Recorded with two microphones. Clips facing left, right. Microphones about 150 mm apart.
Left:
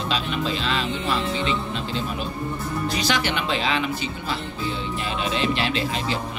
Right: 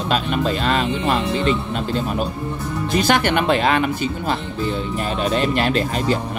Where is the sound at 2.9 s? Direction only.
55° right (ahead or behind).